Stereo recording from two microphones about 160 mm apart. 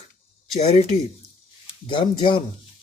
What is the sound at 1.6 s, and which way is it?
Speech, 30° left (ahead or behind).